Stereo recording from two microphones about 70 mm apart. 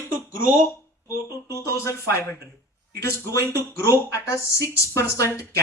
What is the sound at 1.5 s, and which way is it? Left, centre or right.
Speech, left.